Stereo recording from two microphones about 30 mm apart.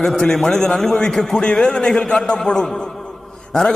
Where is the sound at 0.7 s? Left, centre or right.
Centre.